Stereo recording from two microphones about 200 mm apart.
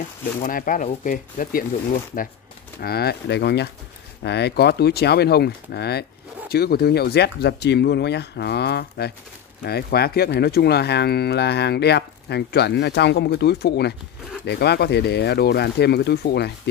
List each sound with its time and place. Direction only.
0.4 s speech: 45° left (ahead or behind)
2.8 s speech: 50° left (ahead or behind)